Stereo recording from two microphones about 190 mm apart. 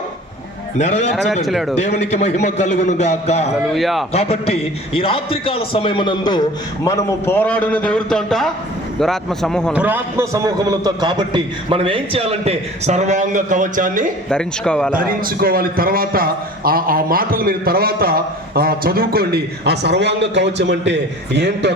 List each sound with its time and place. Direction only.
0.8 s a man's voice: 35° left (ahead or behind)
1.5 s speech: centre (ahead or behind)
1.7 s a man's voice: 35° left (ahead or behind)
3.8 s speech: centre (ahead or behind)
4.1 s a man's voice: 30° left (ahead or behind); by 9.7 s 5° left (ahead or behind)
9.7 s a man's voice: 10° right (ahead or behind); by 14.1 s 45° right (ahead or behind)
14.3 s speech: 5° left (ahead or behind)
14.9 s a man's voice: 50° right (ahead or behind); by 21.7 s 65° right (ahead or behind)